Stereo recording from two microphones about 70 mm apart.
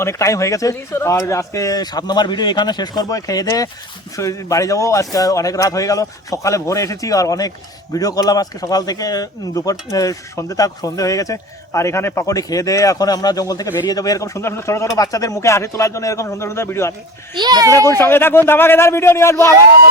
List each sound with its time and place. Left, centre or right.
0.0 s speech: left
1.8 s a man's voice: left
12.3 s speech: left
17.3 s a child's voice: right
17.7 s a man's voice: left